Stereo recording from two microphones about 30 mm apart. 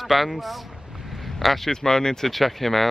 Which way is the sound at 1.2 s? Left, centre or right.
Centre.